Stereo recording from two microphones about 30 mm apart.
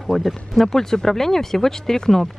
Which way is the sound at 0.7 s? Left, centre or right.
Centre.